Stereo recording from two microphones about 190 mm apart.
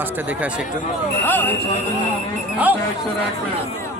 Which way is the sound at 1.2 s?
10° left (ahead or behind).